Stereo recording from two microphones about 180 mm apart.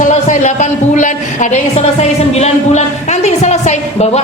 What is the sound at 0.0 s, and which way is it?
A woman's voice, 40° left (ahead or behind).